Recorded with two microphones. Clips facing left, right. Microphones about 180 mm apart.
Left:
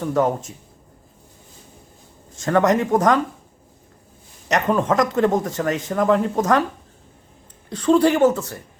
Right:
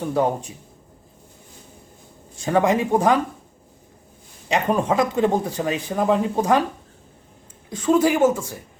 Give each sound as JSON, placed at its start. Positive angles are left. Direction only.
{"t": 0.0, "sound": "speech", "side_deg": -15}
{"t": 2.3, "sound": "speech", "side_deg": -10}
{"t": 4.7, "sound": "speech", "side_deg": -10}
{"t": 7.7, "sound": "speech", "side_deg": -10}